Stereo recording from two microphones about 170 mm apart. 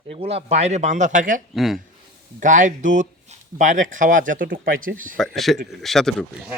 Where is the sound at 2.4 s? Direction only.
50° right (ahead or behind).